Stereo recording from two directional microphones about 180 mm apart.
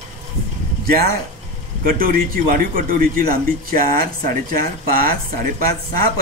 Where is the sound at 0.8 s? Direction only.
55° right (ahead or behind).